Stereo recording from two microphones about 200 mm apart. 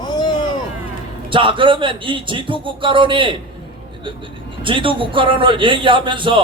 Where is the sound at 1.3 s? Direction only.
25° right (ahead or behind).